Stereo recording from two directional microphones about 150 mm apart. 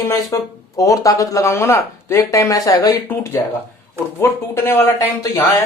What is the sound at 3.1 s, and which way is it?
Speech, 15° left (ahead or behind).